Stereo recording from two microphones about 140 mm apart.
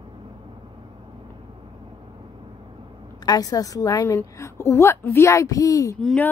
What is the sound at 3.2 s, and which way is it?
A woman's voice, 25° left (ahead or behind).